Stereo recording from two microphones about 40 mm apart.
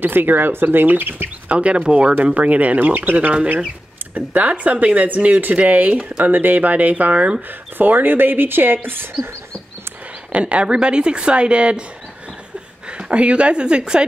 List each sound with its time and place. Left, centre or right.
0.0 s speech: right
1.5 s speech: right
2.3 s speech: right
6.3 s speech: right
7.7 s speech: right
10.3 s a woman's voice: right
12.9 s a woman's voice: right